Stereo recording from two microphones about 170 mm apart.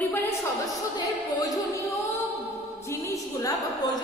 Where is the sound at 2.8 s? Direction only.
20° left (ahead or behind).